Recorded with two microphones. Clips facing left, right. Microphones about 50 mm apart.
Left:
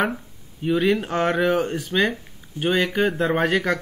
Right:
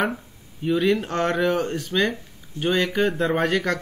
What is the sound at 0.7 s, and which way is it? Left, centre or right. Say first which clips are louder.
Speech: left 1 dB; centre.